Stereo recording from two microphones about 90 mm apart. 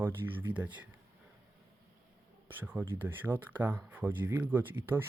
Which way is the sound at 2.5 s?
20° right (ahead or behind).